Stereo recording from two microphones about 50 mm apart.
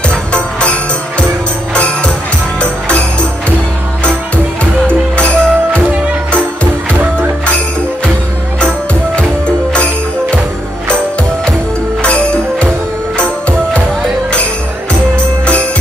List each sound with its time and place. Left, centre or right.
0.1 s music: left
4.8 s music: left
12.0 s music: left